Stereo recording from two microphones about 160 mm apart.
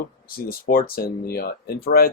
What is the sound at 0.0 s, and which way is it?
Speech, 70° left (ahead or behind).